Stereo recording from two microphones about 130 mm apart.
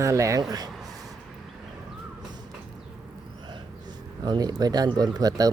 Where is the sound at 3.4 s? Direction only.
35° right (ahead or behind).